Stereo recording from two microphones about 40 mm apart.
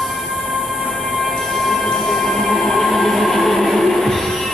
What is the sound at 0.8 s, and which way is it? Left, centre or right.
Music, centre.